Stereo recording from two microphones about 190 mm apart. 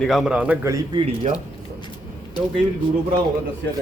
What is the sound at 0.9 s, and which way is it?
Speech, 35° right (ahead or behind).